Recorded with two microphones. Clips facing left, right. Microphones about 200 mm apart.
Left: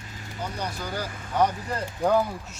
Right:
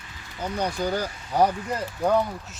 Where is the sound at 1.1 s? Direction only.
50° left (ahead or behind).